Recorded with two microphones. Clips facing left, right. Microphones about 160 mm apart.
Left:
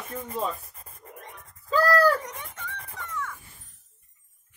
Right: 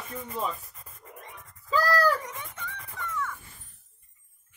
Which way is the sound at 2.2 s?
45° left (ahead or behind).